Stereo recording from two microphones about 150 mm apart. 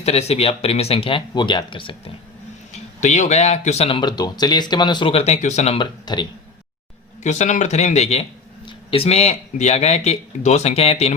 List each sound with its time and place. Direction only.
0.0 s speech: 45° left (ahead or behind)
2.7 s speech: 50° left (ahead or behind)
5.8 s speech: 30° left (ahead or behind)
7.2 s speech: 50° left (ahead or behind)